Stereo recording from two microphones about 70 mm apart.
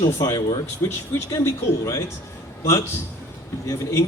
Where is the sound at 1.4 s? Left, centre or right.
Left.